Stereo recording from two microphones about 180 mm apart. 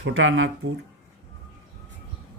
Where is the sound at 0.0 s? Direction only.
90° right.